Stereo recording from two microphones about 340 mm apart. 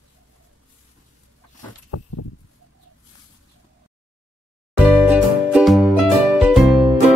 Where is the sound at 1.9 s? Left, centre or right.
Left.